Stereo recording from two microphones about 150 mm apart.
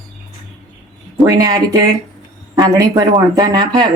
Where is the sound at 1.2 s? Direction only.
25° right (ahead or behind).